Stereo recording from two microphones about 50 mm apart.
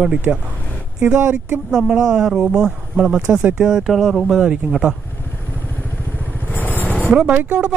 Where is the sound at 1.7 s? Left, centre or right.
Centre.